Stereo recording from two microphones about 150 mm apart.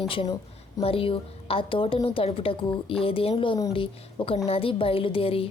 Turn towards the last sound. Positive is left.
turn(degrees=40)  # may be behind; listen again after turning